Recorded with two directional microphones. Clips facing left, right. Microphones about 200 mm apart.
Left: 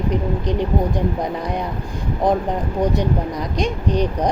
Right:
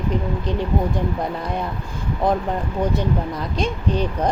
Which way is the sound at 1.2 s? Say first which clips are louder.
Left 2 dB; 15° left (ahead or behind).